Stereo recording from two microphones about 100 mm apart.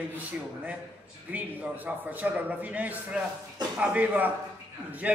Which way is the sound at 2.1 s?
15° right (ahead or behind).